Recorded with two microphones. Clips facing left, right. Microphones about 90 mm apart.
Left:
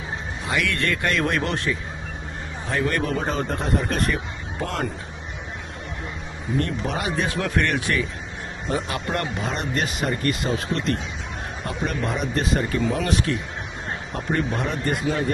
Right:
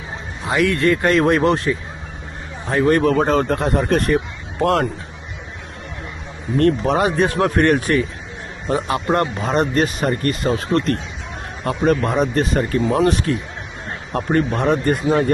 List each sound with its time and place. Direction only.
0.4 s speech: 30° right (ahead or behind); by 4.2 s 45° right (ahead or behind)
4.6 s speech: 70° right (ahead or behind)
6.6 s speech: 50° right (ahead or behind)
9.2 s speech: 45° right (ahead or behind)
14.1 s speech: 50° right (ahead or behind)